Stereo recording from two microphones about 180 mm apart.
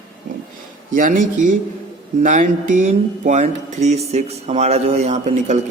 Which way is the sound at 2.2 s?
45° right (ahead or behind).